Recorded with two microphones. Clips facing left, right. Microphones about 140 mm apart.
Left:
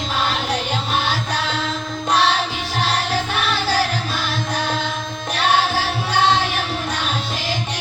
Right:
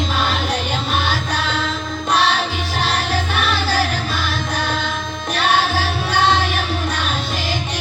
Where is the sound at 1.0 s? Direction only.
25° left (ahead or behind).